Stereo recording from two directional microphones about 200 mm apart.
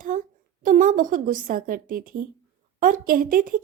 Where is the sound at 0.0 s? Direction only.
40° right (ahead or behind).